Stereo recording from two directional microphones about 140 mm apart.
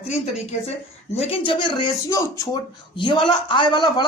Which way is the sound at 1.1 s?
45° left (ahead or behind).